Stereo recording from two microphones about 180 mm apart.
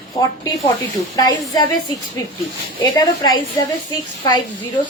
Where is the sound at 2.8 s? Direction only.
20° left (ahead or behind).